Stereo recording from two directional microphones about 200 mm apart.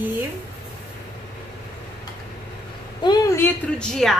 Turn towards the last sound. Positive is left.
turn(degrees=0)  # may be behind; listen again after turning